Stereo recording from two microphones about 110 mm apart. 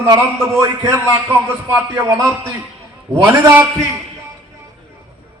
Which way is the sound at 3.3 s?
20° right (ahead or behind).